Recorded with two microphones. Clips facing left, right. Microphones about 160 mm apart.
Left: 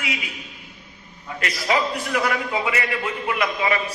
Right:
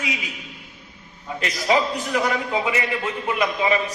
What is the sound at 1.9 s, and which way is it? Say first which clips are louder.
A man's voice: right 1 dB; centre (ahead or behind).